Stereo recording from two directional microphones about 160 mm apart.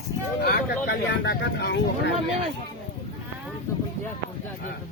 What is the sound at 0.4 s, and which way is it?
Speech, 85° left.